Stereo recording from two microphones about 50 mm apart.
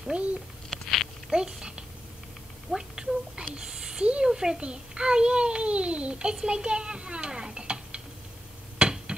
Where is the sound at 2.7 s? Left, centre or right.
Centre.